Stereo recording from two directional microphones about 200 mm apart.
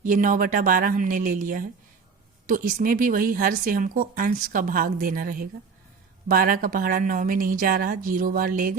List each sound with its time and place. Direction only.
0.0 s a woman's voice: 40° right (ahead or behind)